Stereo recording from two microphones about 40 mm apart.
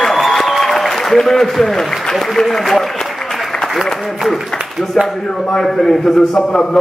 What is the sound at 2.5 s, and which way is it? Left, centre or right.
Applause, centre.